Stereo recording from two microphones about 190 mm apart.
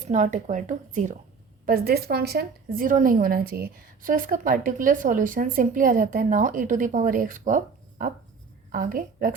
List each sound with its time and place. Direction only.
0.1 s speech: 40° right (ahead or behind)
1.6 s a woman's voice: 55° right (ahead or behind)